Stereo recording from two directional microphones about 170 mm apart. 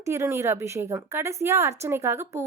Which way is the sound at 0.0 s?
15° right (ahead or behind).